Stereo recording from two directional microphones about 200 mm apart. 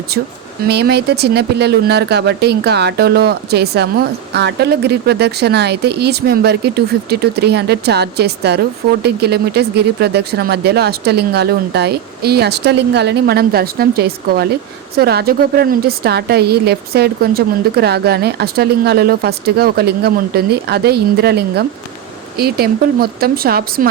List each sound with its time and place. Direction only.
0.7 s a woman's voice: 55° right (ahead or behind)